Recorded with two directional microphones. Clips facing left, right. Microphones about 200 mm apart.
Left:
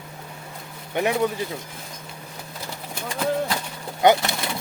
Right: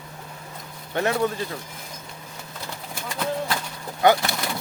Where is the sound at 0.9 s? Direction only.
15° left (ahead or behind).